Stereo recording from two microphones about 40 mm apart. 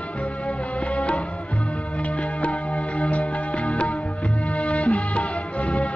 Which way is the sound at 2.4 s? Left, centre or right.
Left.